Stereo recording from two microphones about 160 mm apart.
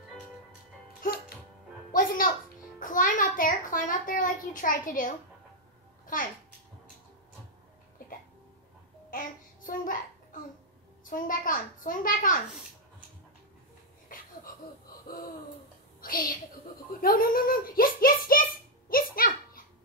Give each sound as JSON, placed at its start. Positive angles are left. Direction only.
{"t": 1.9, "sound": "music", "side_deg": 60}
{"t": 2.8, "sound": "a child's voice", "side_deg": 55}
{"t": 9.1, "sound": "child singing", "side_deg": 55}
{"t": 10.3, "sound": "babbling", "side_deg": 55}
{"t": 11.1, "sound": "a child's voice", "side_deg": 55}
{"t": 14.0, "sound": "a sound", "side_deg": 60}
{"t": 16.0, "sound": "a sound", "side_deg": 65}